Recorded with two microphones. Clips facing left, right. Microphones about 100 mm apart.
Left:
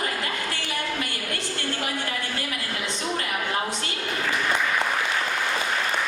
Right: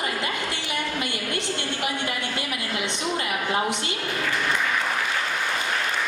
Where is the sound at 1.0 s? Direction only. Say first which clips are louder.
Right 3 dB; 20° right (ahead or behind).